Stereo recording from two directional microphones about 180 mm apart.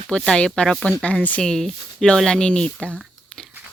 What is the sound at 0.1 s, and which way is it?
Speech, 5° left (ahead or behind).